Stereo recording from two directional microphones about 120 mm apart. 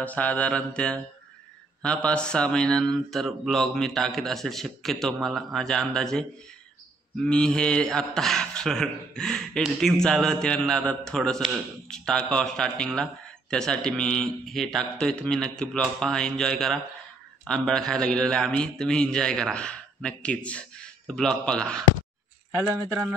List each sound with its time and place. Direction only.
0.0 s a man's voice: 10° left (ahead or behind)
1.8 s a sound: 10° left (ahead or behind)
17.5 s a man's voice: 5° left (ahead or behind)
22.8 s speech: 20° right (ahead or behind)